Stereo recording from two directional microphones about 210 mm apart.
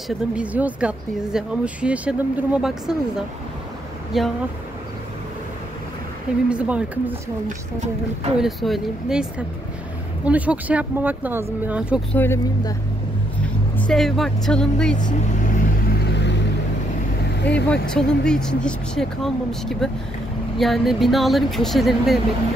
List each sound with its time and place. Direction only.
0.4 s speech: 5° right (ahead or behind)
6.5 s speech: 5° right (ahead or behind)
8.4 s speech: centre (ahead or behind)
12.1 s speech: 10° left (ahead or behind)
13.7 s speech: 5° left (ahead or behind)
15.1 s vehicle: 40° left (ahead or behind)
17.4 s speech: 55° left (ahead or behind)
17.6 s speech: 5° left (ahead or behind)